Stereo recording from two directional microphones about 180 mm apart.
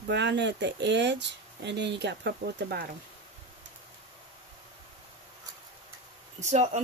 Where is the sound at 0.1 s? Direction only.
75° right (ahead or behind).